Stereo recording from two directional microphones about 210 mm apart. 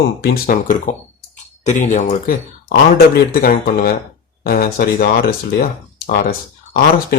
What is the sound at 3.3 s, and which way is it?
Speech, 45° left (ahead or behind).